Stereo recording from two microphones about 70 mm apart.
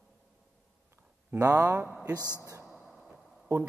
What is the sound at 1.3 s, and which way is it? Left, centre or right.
Speech, right.